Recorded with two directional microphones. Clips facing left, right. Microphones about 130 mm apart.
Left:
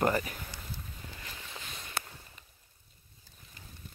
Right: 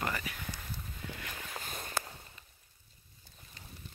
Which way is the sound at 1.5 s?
45° right (ahead or behind).